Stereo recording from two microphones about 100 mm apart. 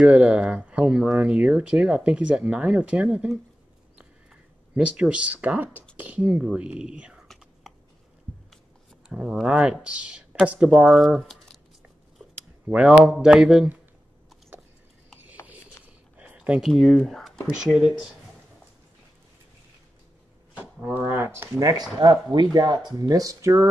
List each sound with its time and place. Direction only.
0.0 s speech: 10° right (ahead or behind)
4.0 s a sound: 10° right (ahead or behind)
5.9 s speech: 15° right (ahead or behind)
9.1 s speech: 5° right (ahead or behind)
12.6 s speech: 10° right (ahead or behind)
14.5 s horse: 20° right (ahead or behind)
16.2 s a sound: 15° right (ahead or behind)
16.7 s speech: 5° left (ahead or behind)
17.7 s speech: 10° right (ahead or behind)
20.8 s speech: 20° right (ahead or behind)
21.9 s speech: 45° right (ahead or behind); by 23.7 s 30° right (ahead or behind)